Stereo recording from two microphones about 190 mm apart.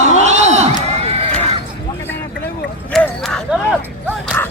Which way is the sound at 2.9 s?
5° left (ahead or behind).